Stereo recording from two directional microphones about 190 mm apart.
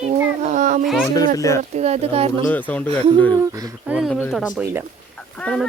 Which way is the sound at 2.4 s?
10° left (ahead or behind).